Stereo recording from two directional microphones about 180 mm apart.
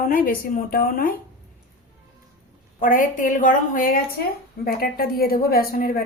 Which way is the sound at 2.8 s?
50° left (ahead or behind).